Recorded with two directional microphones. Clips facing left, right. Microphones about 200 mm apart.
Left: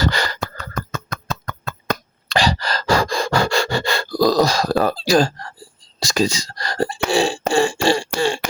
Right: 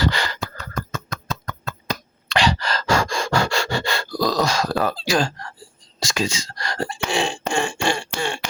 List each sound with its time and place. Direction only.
0.0 s beatboxing: 40° left (ahead or behind)
0.4 s a sound: 55° left (ahead or behind)
2.3 s rub: 35° left (ahead or behind)
6.0 s speech: 35° left (ahead or behind)